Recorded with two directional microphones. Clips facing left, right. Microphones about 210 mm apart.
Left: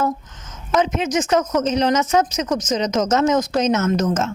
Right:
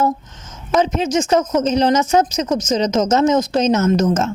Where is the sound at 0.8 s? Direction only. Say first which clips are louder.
Right 2 dB; 30° right (ahead or behind).